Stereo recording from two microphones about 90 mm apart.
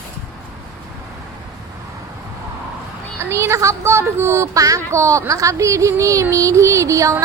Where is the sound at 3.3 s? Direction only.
30° right (ahead or behind).